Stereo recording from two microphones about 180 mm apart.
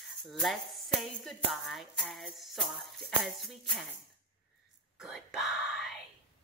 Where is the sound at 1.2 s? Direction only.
Centre (ahead or behind).